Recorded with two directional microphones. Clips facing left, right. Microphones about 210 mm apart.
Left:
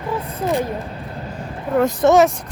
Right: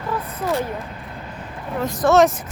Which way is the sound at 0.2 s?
30° left (ahead or behind).